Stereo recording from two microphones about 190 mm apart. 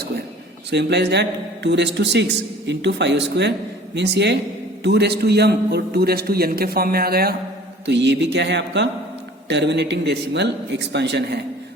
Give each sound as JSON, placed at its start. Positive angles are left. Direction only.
{"t": 0.7, "sound": "a man's voice", "side_deg": -65}
{"t": 7.9, "sound": "a man's voice", "side_deg": -65}